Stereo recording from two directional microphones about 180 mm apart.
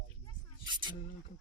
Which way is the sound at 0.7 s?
25° right (ahead or behind).